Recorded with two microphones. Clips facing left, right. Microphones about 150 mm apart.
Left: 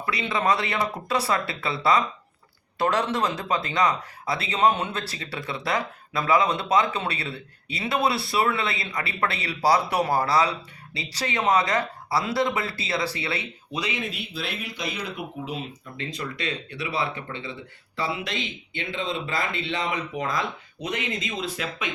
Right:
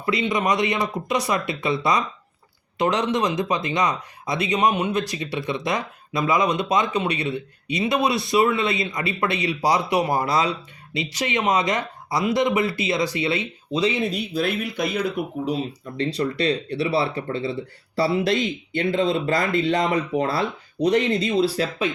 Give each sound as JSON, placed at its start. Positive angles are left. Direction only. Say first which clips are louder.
{"t": 0.0, "sound": "speech", "louder": "right 3 dB", "side_deg": -20}